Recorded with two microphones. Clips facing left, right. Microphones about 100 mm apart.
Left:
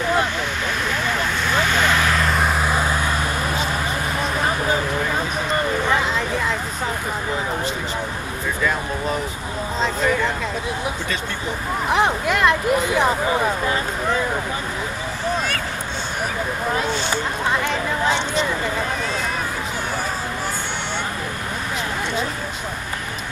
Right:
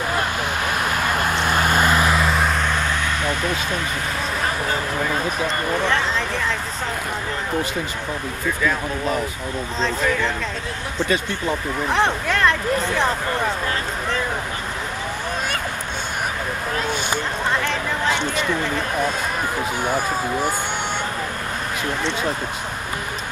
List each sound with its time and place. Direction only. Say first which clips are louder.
0.8 s vehicle: right 1 dB; 50° right (ahead or behind)
2.0 s vehicle: right 1 dB; 5° right (ahead or behind); by 3.0 s 10° left (ahead or behind)
5.9 s a sound: left 1 dB; 5° left (ahead or behind)
9.8 s a sound: left 1 dB; 5° left (ahead or behind)
11.9 s speech: left 1 dB; 5° left (ahead or behind)
17.5 s chatter: left 1 dB; 5° left (ahead or behind)